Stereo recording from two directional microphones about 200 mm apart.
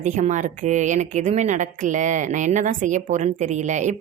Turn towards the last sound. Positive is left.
turn(degrees=-35)  # may be behind; listen again after turning